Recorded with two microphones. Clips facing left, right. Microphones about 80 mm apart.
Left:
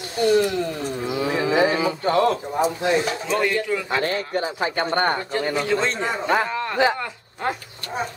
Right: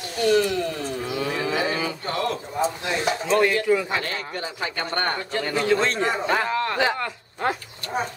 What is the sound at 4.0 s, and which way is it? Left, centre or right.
Speech, left.